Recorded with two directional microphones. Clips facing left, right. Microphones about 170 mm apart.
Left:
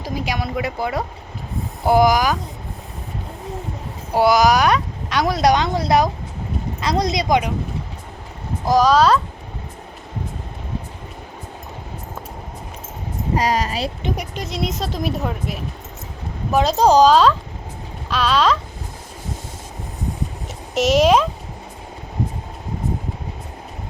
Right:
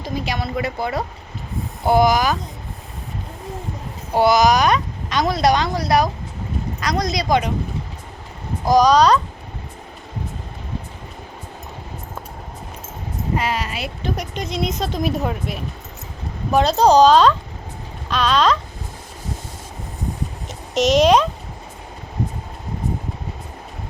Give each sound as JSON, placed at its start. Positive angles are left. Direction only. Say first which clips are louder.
{"t": 0.0, "sound": "speech", "louder": "even", "side_deg": 10}
{"t": 4.1, "sound": "speech", "louder": "even", "side_deg": 10}
{"t": 8.6, "sound": "speech", "louder": "right 1 dB", "side_deg": 5}
{"t": 13.3, "sound": "speech", "louder": "left 4 dB", "side_deg": 40}
{"t": 14.3, "sound": "speech", "louder": "right 1 dB", "side_deg": 5}
{"t": 20.7, "sound": "speech", "louder": "even", "side_deg": 5}